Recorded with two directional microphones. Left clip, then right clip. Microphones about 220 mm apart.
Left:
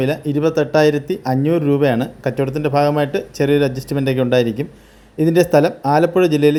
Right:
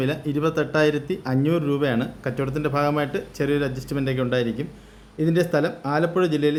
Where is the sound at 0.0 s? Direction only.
15° left (ahead or behind).